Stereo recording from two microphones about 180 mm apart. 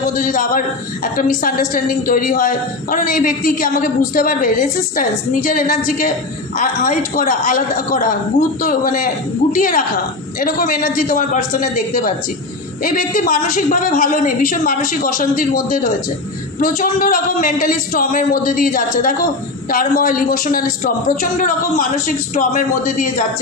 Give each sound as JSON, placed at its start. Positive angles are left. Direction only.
{"t": 0.2, "sound": "a woman's voice", "side_deg": 50}